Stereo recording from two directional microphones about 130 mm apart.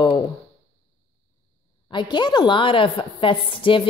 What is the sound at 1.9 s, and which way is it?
A woman's voice, 35° left (ahead or behind).